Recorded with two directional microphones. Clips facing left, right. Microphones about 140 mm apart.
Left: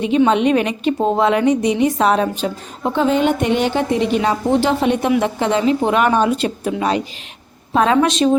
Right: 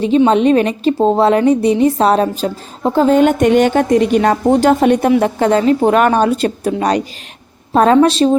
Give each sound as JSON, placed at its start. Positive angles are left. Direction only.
{"t": 0.3, "sound": "a woman's voice", "side_deg": -35}